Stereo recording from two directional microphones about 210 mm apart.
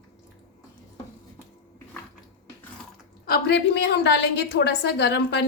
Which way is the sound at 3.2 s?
50° left (ahead or behind).